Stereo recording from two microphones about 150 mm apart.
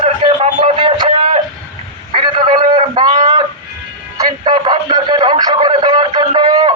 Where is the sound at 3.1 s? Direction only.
45° right (ahead or behind).